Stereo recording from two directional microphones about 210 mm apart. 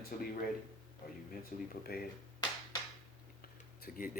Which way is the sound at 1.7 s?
45° left (ahead or behind).